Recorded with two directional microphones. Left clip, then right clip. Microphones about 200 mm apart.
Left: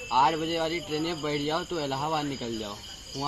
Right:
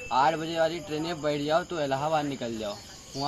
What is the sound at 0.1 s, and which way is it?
A man's voice, 25° right (ahead or behind).